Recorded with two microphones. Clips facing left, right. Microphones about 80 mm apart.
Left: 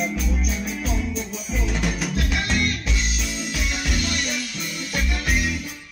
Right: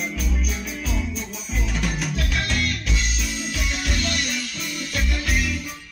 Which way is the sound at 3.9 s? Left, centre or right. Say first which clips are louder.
Even; centre.